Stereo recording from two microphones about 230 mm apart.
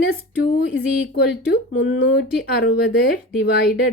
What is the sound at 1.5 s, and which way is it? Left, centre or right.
Speech, left.